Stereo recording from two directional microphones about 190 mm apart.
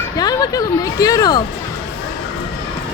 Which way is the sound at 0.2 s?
20° left (ahead or behind).